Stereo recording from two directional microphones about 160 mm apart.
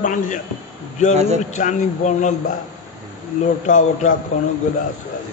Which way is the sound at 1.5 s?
50° left (ahead or behind).